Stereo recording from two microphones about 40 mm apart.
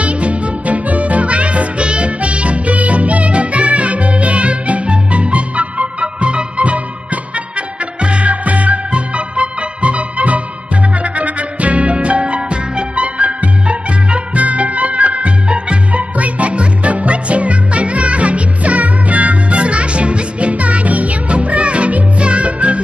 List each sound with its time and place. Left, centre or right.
0.0 s music: right
8.0 s music: right